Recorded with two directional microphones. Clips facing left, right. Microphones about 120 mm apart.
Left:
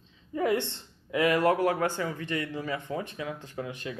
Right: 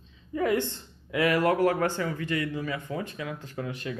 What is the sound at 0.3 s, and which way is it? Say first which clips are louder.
Speech: right 1 dB; 25° left (ahead or behind).